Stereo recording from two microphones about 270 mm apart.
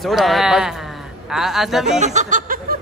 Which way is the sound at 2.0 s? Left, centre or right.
Right.